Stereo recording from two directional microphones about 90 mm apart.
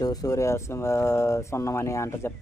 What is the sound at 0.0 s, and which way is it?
Speech, 45° left (ahead or behind).